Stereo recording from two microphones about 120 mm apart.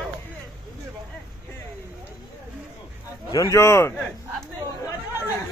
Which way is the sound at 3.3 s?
25° left (ahead or behind).